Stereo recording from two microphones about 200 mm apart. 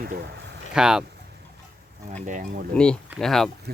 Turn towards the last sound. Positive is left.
turn(degrees=-50)  # may be behind; listen again after turning